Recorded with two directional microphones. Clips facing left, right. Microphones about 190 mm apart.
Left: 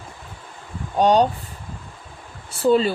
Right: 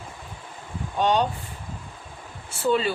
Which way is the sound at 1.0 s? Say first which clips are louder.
Left 6 dB; 40° left (ahead or behind).